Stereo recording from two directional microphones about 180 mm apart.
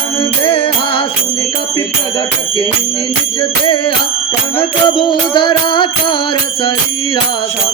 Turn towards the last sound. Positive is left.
turn(degrees=25)  # may be behind; listen again after turning